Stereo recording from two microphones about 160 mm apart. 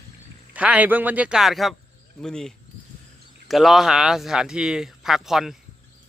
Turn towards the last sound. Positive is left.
turn(degrees=0)  # may be behind; listen again after turning